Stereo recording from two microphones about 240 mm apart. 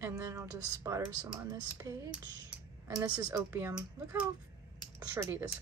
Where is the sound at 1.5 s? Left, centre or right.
Centre.